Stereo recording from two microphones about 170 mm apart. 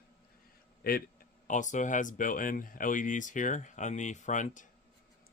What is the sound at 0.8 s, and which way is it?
Speech, 65° left (ahead or behind).